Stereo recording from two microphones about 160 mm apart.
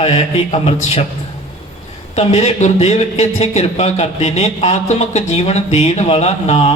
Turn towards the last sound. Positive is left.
turn(degrees=40)  # may be behind; listen again after turning